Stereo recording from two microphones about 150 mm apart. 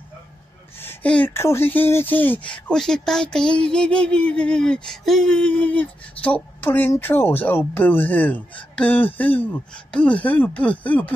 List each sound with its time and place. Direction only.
0.7 s speech: 10° left (ahead or behind)